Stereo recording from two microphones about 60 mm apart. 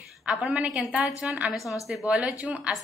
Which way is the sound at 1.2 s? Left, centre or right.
Right.